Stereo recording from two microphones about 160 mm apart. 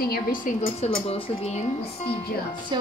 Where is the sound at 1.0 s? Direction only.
35° left (ahead or behind).